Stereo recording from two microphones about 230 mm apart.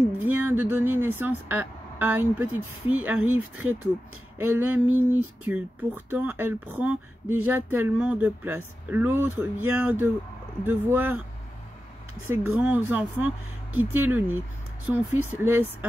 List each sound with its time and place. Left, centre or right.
0.2 s speech: centre
12.3 s speech: centre